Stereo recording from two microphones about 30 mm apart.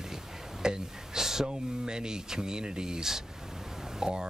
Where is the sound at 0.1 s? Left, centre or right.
Centre.